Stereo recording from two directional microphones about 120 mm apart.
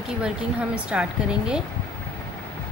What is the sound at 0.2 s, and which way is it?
Speech, 10° right (ahead or behind).